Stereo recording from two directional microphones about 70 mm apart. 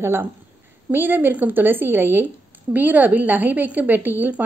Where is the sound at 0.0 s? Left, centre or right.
Right.